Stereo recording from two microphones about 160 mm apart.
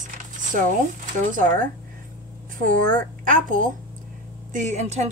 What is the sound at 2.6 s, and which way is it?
A woman's voice, 55° right (ahead or behind).